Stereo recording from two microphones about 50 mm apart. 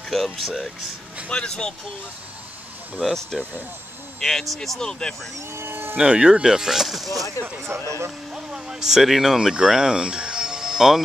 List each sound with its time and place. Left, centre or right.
0.1 s speech: centre
1.3 s speech: centre
3.2 s speech: centre
5.6 s a sound: right
5.9 s speech: centre
7.6 s speech: right
8.5 s speech: centre